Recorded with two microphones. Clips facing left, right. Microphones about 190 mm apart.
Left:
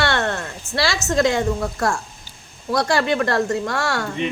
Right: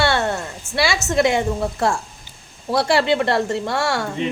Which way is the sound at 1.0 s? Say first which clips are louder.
Even; 20° right (ahead or behind).